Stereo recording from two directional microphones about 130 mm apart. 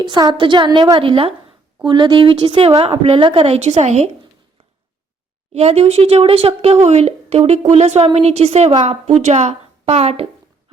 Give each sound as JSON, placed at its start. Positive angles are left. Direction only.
{"t": 0.0, "sound": "a woman's voice", "side_deg": -35}
{"t": 5.5, "sound": "a woman's voice", "side_deg": -55}